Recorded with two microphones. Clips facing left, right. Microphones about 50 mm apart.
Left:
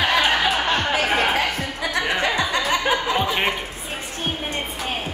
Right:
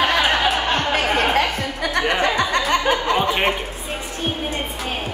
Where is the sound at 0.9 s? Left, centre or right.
Right.